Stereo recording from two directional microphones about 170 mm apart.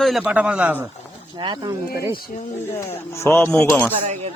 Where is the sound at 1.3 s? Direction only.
25° right (ahead or behind).